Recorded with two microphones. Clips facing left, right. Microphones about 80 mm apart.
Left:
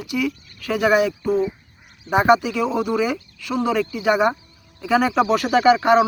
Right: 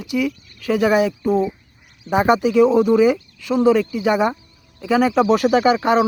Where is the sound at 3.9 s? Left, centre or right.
Centre.